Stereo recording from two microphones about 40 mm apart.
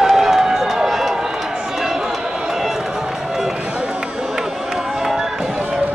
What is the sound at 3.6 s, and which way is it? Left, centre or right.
Run, right.